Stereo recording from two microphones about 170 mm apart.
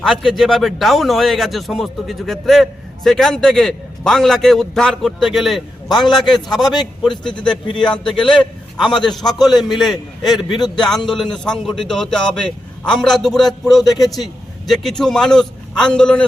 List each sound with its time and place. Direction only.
0.0 s a man's voice: centre (ahead or behind)
5.9 s a man's voice: 25° left (ahead or behind)
6.1 s a man's voice: centre (ahead or behind)
9.6 s a man's voice: centre (ahead or behind)
10.2 s a man's voice: 25° left (ahead or behind)
10.8 s a man's voice: 5° left (ahead or behind)